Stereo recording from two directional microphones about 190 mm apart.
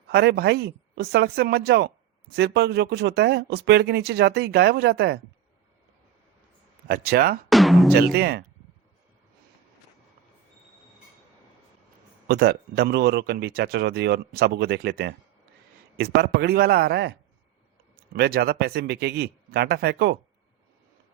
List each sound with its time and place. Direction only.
0.1 s speech: 60° right (ahead or behind)
6.8 s speech: 55° right (ahead or behind)
7.5 s music: centre (ahead or behind)
7.9 s speech: 55° right (ahead or behind)
12.3 s speech: 55° right (ahead or behind)